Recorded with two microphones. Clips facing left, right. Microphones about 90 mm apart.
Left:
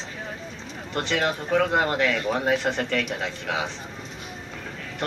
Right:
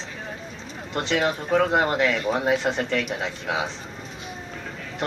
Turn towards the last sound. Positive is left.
turn(degrees=-20)  # may be behind; listen again after turning